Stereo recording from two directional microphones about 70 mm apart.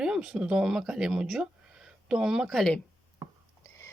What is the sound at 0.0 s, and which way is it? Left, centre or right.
Speech, centre.